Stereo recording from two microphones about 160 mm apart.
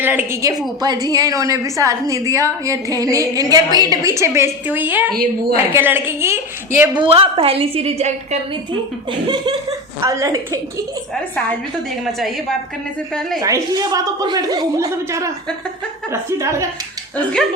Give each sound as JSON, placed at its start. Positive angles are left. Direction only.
{"t": 0.0, "sound": "a woman's voice", "side_deg": -15}
{"t": 5.1, "sound": "a woman's voice", "side_deg": -70}
{"t": 5.7, "sound": "a woman's voice", "side_deg": -15}
{"t": 7.0, "sound": "a woman's voice", "side_deg": -35}
{"t": 9.0, "sound": "a woman's voice", "side_deg": -30}
{"t": 11.9, "sound": "a woman's voice", "side_deg": 0}
{"t": 13.4, "sound": "a woman's voice", "side_deg": -20}